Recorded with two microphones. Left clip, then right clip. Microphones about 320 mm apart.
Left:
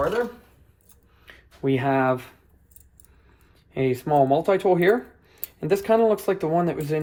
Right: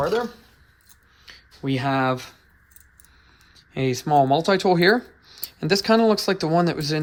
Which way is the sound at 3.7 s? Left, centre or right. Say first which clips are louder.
Right 2 dB; centre.